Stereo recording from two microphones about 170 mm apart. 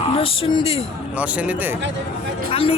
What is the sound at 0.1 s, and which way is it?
Speech, 35° left (ahead or behind).